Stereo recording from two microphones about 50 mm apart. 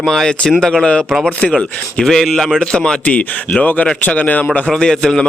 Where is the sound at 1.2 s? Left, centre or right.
Left.